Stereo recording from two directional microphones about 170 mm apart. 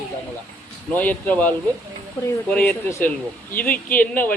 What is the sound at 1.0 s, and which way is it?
Speech, 10° left (ahead or behind).